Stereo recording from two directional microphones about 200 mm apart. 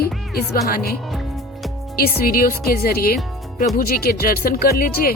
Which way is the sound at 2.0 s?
50° left (ahead or behind).